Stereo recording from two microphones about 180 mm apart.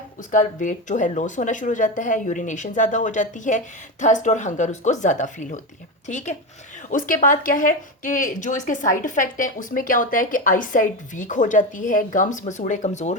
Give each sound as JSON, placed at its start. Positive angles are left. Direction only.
{"t": 0.3, "sound": "speech", "side_deg": 45}